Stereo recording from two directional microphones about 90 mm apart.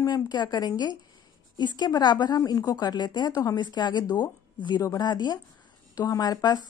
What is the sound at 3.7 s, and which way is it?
Speech, 55° left (ahead or behind).